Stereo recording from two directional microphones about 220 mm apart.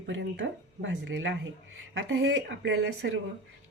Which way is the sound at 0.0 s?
55° right (ahead or behind).